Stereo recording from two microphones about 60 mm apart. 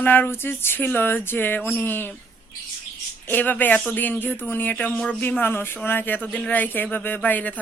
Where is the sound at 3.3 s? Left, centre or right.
Left.